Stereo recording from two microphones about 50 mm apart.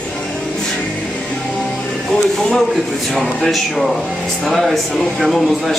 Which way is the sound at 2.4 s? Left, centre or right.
Centre.